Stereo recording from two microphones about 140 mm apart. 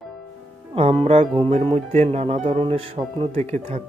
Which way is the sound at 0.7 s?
45° right (ahead or behind).